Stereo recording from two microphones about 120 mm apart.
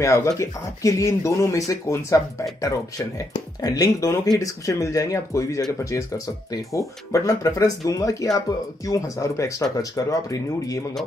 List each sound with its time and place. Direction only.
0.0 s speech: 25° left (ahead or behind)